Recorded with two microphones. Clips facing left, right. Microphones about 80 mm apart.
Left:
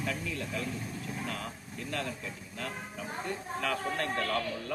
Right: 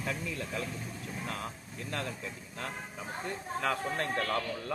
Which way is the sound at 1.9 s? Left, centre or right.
Right.